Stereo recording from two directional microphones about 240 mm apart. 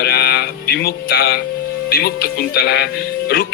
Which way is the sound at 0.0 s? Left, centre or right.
Left.